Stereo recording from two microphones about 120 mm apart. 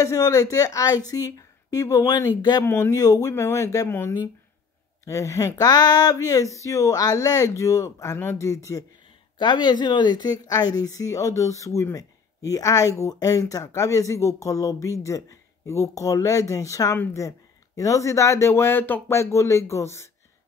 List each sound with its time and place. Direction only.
0.0 s a woman's voice: 30° left (ahead or behind)
2.6 s a woman's voice: 25° left (ahead or behind)
9.4 s a woman's voice: 40° left (ahead or behind)